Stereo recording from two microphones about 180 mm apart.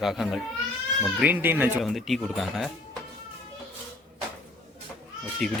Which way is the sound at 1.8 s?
Centre (ahead or behind).